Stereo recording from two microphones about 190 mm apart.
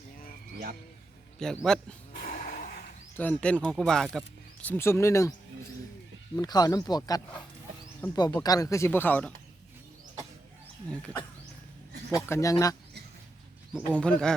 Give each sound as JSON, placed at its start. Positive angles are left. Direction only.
{"t": 1.4, "sound": "speech", "side_deg": 5}
{"t": 2.2, "sound": "a sound", "side_deg": 50}
{"t": 3.2, "sound": "speech", "side_deg": 5}
{"t": 6.3, "sound": "speech", "side_deg": 20}
{"t": 10.8, "sound": "speech", "side_deg": 5}
{"t": 12.2, "sound": "speech", "side_deg": 15}
{"t": 13.7, "sound": "speech", "side_deg": 5}